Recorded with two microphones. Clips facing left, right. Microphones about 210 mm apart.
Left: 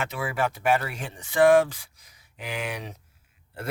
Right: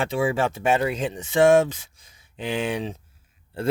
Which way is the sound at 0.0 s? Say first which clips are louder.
Right 5 dB; 30° right (ahead or behind).